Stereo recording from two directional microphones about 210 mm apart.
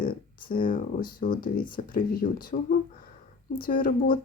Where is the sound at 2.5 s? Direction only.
45° left (ahead or behind).